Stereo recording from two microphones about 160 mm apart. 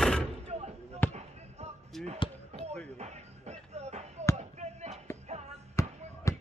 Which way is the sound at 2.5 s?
45° right (ahead or behind).